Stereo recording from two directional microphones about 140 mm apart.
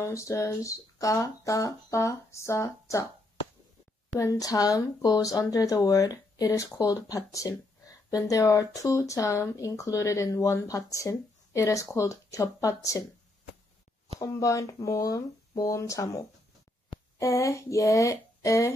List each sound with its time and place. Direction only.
0.0 s speech: 20° left (ahead or behind)
4.2 s speech: 25° left (ahead or behind)
14.2 s speech: 20° left (ahead or behind)